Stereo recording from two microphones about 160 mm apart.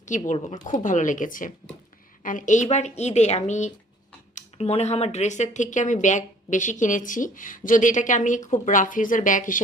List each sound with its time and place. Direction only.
0.0 s a woman's voice: 50° left (ahead or behind)